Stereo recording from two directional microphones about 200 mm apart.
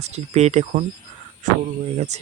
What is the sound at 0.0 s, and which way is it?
Speech, 35° right (ahead or behind).